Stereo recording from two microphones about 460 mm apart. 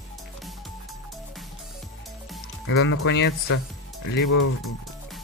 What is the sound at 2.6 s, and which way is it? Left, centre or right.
Speech, left.